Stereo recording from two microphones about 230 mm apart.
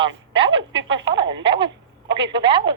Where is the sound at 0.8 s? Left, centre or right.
Right.